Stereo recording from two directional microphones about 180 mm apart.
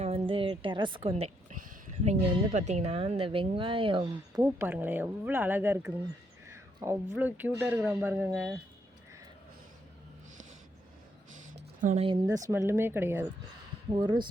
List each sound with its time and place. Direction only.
0.0 s a sound: 30° right (ahead or behind)
2.0 s speech: 40° right (ahead or behind); by 8.6 s 5° right (ahead or behind)
11.8 s speech: 45° right (ahead or behind)
12.0 s speech: 20° right (ahead or behind)
14.0 s speech: 25° right (ahead or behind)